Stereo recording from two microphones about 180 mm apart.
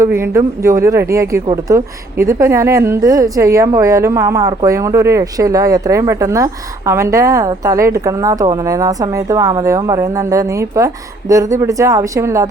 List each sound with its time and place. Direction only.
0.0 s a woman's voice: 15° right (ahead or behind)